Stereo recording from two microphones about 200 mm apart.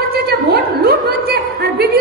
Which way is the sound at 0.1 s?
50° right (ahead or behind).